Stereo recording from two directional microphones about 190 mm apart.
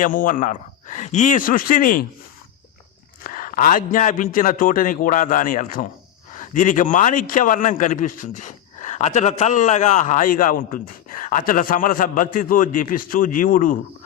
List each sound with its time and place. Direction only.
0.0 s a man's voice: 45° left (ahead or behind)
3.2 s a man's voice: 45° left (ahead or behind)